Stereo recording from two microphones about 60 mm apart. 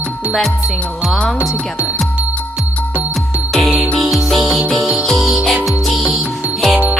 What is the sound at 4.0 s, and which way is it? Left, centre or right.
Music, centre.